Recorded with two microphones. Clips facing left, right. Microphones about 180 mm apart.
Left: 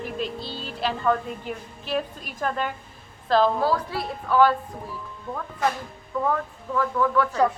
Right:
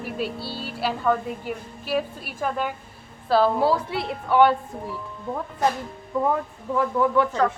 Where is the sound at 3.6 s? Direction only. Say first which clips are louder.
Right 2 dB; 25° right (ahead or behind).